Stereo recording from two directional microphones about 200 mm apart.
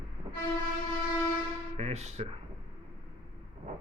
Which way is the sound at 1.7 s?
35° right (ahead or behind).